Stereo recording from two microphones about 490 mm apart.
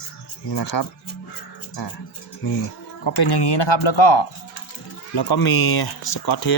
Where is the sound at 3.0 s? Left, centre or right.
Left.